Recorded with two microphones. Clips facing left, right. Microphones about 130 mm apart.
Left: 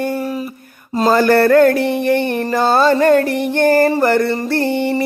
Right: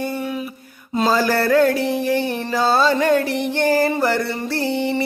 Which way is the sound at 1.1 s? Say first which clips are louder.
Left 7 dB; 55° left (ahead or behind).